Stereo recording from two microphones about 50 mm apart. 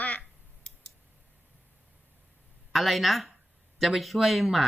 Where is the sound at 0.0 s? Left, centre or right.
Left.